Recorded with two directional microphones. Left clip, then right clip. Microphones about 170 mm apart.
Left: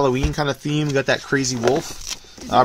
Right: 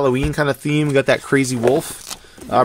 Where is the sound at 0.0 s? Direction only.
25° right (ahead or behind).